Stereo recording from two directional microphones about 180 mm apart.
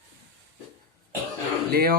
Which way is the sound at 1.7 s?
55° right (ahead or behind).